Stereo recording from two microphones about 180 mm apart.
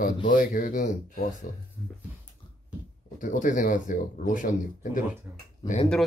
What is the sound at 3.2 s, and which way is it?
Speech, 45° left (ahead or behind).